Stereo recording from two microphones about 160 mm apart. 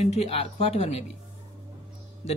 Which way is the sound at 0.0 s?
45° left (ahead or behind).